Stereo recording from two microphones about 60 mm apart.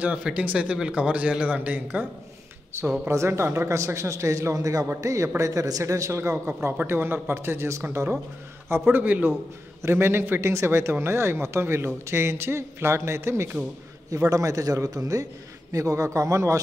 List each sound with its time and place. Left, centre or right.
0.0 s speech: centre
2.7 s speech: right
6.8 s speech: right
8.8 s speech: right
9.8 s speech: right
14.1 s a man's voice: right
15.7 s speech: right